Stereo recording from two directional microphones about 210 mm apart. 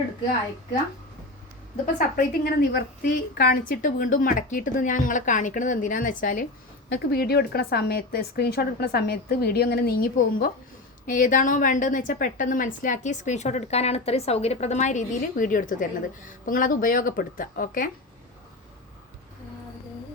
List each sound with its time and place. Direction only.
2.0 s a woman's voice: 45° left (ahead or behind)